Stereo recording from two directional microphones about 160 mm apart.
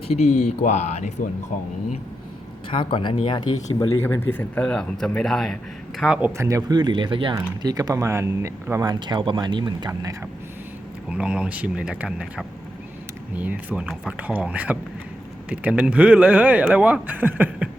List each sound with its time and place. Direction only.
0.2 s speech: 45° left (ahead or behind)
2.6 s speech: 30° left (ahead or behind)
3.9 s speech: 15° left (ahead or behind); by 8.9 s 15° right (ahead or behind)
8.9 s speech: 25° right (ahead or behind)
11.1 s speech: 5° right (ahead or behind)